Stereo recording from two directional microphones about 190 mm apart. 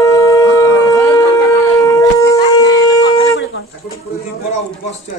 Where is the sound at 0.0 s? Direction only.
15° left (ahead or behind).